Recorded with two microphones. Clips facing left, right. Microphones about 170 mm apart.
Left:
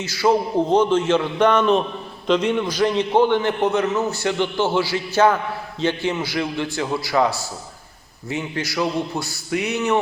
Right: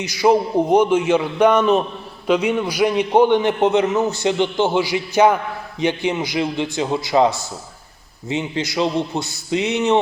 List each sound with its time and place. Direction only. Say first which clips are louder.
0.0 s a man's voice: right 3 dB; 15° right (ahead or behind)